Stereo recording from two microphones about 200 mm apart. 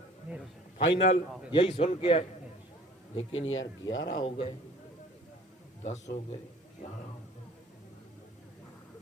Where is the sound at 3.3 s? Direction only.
75° left (ahead or behind).